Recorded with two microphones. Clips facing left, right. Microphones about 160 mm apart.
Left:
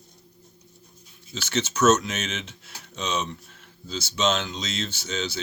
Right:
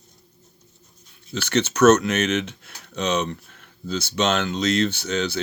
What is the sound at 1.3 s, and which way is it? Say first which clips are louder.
Speech: right 6 dB; 60° right (ahead or behind).